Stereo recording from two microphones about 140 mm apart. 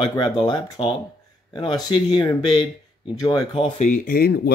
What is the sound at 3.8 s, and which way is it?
Speech, 75° left (ahead or behind).